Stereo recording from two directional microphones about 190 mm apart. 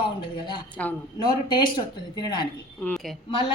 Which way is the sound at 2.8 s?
Centre (ahead or behind).